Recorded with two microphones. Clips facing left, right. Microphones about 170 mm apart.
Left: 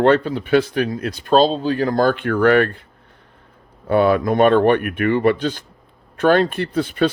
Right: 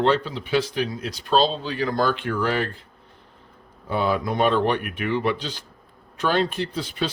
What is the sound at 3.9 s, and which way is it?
Speech, 60° left (ahead or behind).